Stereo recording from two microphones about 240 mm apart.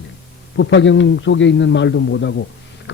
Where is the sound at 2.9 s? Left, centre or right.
Left.